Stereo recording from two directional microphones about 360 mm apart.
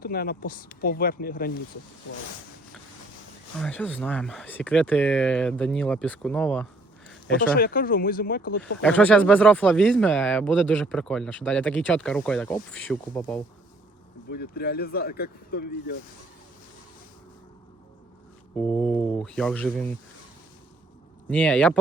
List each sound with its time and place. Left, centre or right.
0.0 s speech: left
3.6 s speech: centre
7.3 s speech: left
8.8 s speech: centre
14.3 s speech: left
18.5 s speech: centre
21.2 s speech: centre